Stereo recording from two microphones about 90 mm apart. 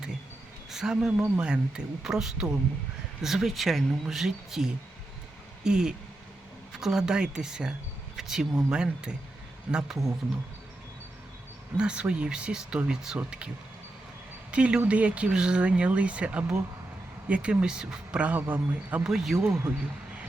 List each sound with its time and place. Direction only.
0.7 s speech: 5° right (ahead or behind)
11.8 s speech: 10° right (ahead or behind)
14.5 s speech: 15° right (ahead or behind)
19.0 s speech: 5° right (ahead or behind)
19.5 s speech: 30° right (ahead or behind)